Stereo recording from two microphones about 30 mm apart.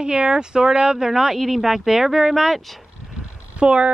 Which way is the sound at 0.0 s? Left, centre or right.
Right.